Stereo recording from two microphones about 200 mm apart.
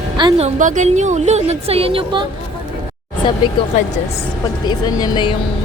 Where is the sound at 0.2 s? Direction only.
25° right (ahead or behind).